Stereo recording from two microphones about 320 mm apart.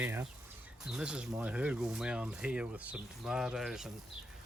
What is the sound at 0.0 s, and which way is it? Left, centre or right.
Speech, centre.